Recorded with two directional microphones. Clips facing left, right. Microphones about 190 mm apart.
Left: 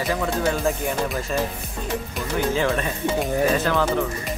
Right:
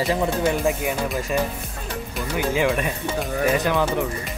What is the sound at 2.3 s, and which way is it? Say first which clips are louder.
Speech: even; 10° right (ahead or behind).